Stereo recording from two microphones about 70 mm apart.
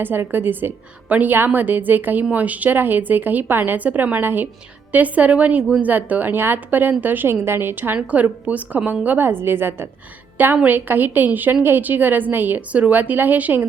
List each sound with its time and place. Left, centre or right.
0.0 s a woman's voice: right